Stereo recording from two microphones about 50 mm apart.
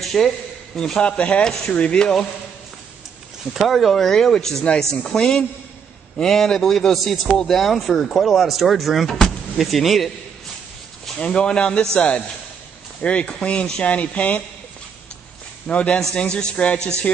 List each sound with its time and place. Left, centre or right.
0.0 s a sound: centre
0.7 s speech: centre
3.5 s speech: centre
11.1 s speech: centre
13.0 s speech: left
15.6 s speech: left